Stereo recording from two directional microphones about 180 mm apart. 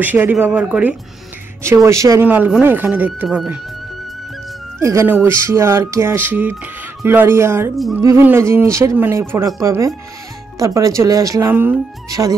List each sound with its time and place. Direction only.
0.0 s speech: 10° right (ahead or behind)
4.7 s speech: 15° right (ahead or behind)
7.7 s music: centre (ahead or behind)
8.0 s speech: 15° right (ahead or behind)